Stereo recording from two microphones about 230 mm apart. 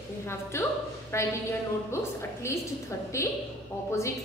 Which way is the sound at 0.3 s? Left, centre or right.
Centre.